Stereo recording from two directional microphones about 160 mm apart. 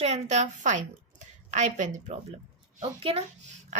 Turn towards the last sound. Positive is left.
turn(degrees=-40)  # may be behind; listen again after turning